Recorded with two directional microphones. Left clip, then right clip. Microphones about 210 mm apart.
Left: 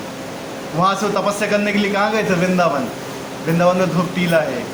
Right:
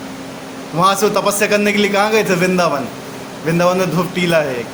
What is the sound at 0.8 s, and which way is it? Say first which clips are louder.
A man's voice: right 4 dB; 55° right (ahead or behind).